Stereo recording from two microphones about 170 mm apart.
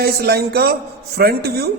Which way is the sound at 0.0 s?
65° right (ahead or behind).